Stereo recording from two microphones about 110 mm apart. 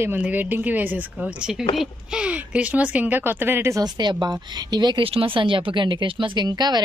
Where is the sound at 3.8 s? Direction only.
40° right (ahead or behind).